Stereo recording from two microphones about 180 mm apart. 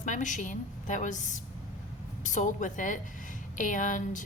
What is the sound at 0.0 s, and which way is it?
A woman's voice, 45° left (ahead or behind).